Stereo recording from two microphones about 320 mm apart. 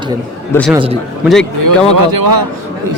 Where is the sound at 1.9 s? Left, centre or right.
Right.